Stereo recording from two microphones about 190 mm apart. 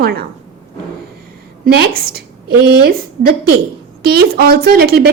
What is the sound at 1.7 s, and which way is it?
A woman's voice, 55° right (ahead or behind).